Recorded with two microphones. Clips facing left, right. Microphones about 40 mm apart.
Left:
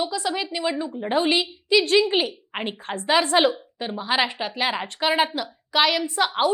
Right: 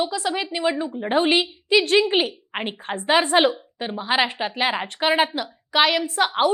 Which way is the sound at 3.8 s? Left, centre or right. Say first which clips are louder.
Right 2 dB; centre.